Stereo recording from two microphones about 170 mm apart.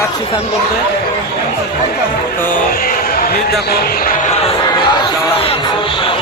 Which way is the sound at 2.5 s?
60° left (ahead or behind).